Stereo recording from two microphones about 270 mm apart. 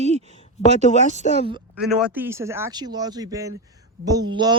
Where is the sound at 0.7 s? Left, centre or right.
Right.